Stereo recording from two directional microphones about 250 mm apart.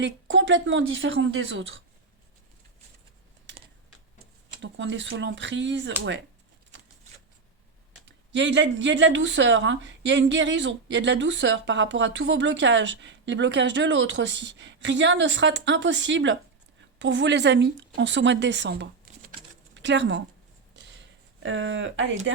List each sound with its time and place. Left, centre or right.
0.0 s speech: right
3.5 s typing: right
4.6 s speech: right
6.7 s a sound: right
8.0 s speech: right
20.7 s a sound: right
21.4 s speech: right